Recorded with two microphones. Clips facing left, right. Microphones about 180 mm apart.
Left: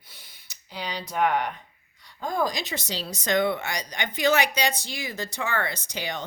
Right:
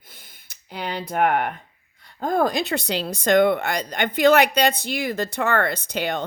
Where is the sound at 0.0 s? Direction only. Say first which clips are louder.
Right 3 dB; 50° right (ahead or behind).